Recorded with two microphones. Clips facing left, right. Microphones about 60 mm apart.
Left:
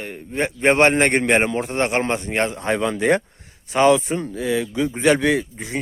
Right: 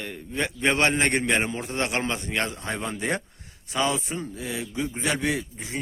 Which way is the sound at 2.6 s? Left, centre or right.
Left.